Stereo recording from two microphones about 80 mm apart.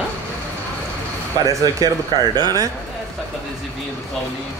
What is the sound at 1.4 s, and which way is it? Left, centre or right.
Speech, right.